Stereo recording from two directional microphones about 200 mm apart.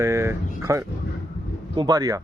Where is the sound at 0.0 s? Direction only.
15° right (ahead or behind).